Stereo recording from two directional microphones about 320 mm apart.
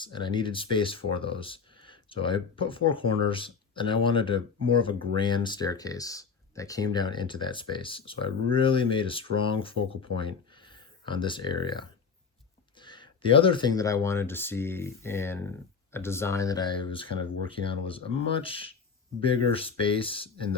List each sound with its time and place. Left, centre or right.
0.0 s speech: centre